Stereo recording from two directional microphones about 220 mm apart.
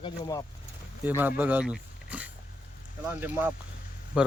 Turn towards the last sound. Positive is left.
turn(degrees=-5)  # may be behind; listen again after turning